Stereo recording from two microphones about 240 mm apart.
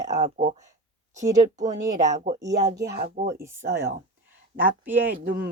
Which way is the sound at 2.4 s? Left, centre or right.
Centre.